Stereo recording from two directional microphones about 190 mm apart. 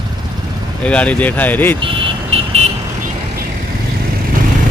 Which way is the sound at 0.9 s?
5° left (ahead or behind).